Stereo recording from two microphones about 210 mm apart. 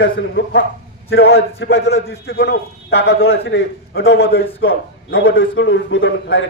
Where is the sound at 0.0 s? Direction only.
65° left (ahead or behind).